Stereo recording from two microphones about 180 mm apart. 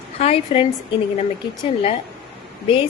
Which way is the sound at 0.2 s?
35° left (ahead or behind).